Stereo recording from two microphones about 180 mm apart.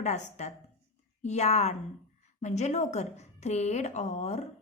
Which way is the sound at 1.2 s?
35° left (ahead or behind).